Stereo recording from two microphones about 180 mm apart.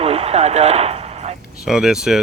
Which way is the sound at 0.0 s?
35° right (ahead or behind).